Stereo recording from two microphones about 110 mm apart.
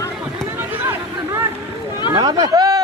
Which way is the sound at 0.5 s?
20° right (ahead or behind).